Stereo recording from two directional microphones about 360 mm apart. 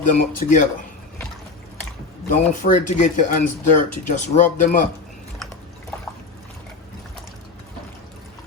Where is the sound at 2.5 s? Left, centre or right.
Left.